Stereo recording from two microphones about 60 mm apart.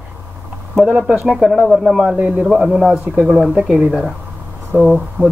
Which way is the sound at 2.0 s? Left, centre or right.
Centre.